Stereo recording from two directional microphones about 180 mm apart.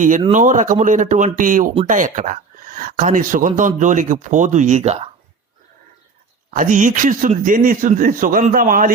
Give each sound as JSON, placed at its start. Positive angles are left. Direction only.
{"t": 0.3, "sound": "speech", "side_deg": -45}
{"t": 6.5, "sound": "speech", "side_deg": -45}